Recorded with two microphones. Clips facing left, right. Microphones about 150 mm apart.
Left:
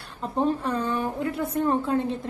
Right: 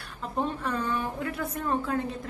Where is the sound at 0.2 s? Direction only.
35° left (ahead or behind).